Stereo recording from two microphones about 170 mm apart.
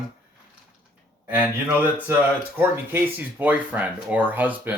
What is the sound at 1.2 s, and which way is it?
Speech, 10° right (ahead or behind).